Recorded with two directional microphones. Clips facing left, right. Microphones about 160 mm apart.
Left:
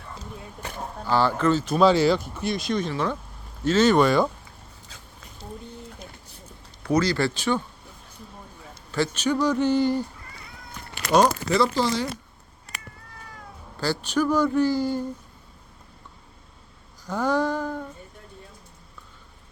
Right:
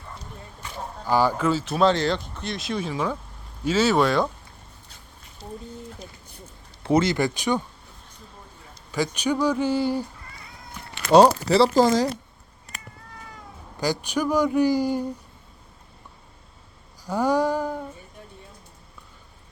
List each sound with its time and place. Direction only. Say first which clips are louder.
1.0 s speech: even; 10° right (ahead or behind)
6.8 s a man's voice: right 2 dB; 25° right (ahead or behind)
8.9 s a man's voice: even; 10° right (ahead or behind)
11.1 s speech: right 5 dB; 30° right (ahead or behind)
11.7 s speech: right 6 dB; 45° right (ahead or behind)
13.7 s a man's voice: left 1 dB; 15° right (ahead or behind)
17.1 s a man's voice: right 2 dB; 10° right (ahead or behind)